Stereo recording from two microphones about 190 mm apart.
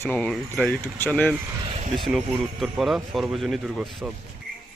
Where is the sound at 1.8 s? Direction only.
35° right (ahead or behind).